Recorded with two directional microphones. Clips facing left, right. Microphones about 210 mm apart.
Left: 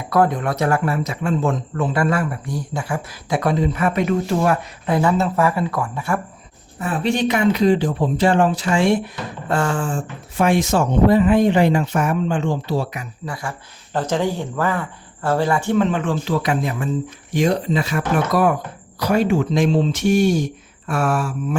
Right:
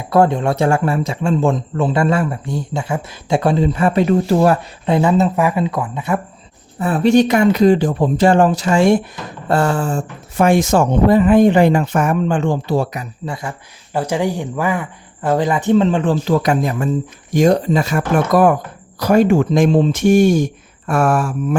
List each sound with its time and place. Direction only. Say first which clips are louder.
0.0 s speech: right 4 dB; 25° right (ahead or behind)
4.9 s speech: right 3 dB; 20° right (ahead or behind)
6.7 s speech: right 8 dB; 40° right (ahead or behind)
13.2 s speech: right 3 dB; 25° right (ahead or behind)
13.9 s speech: right 2 dB; 10° right (ahead or behind); by 21.3 s 50° right (ahead or behind)